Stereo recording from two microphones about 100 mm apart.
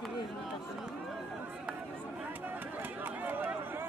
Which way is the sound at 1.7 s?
15° right (ahead or behind).